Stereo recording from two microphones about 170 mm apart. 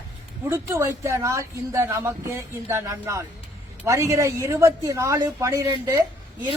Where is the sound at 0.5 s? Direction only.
15° right (ahead or behind).